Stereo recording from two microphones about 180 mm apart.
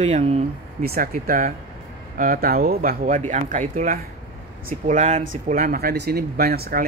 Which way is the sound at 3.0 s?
40° right (ahead or behind).